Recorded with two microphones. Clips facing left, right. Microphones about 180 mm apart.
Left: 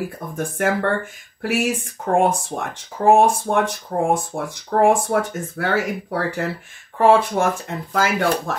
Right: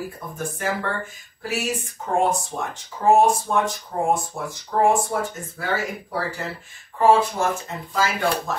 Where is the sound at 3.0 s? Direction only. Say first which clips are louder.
Left 3 dB; 70° left (ahead or behind).